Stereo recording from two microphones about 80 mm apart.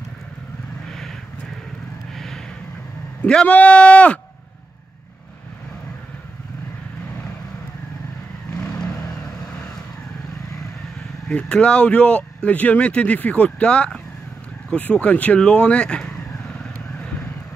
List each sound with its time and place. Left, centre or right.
2.1 s a sound: centre
3.2 s speech: centre
11.2 s speech: centre